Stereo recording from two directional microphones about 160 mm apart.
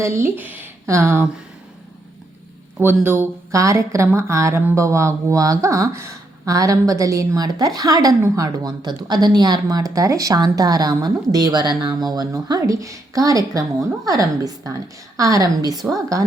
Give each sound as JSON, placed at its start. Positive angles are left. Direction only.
{"t": 0.0, "sound": "speech", "side_deg": -15}
{"t": 2.7, "sound": "speech", "side_deg": -15}